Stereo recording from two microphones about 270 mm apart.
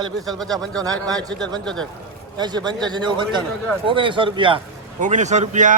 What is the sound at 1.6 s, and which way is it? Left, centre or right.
Speech, centre.